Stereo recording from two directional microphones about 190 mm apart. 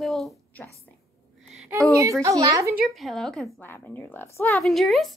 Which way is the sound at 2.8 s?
Centre (ahead or behind).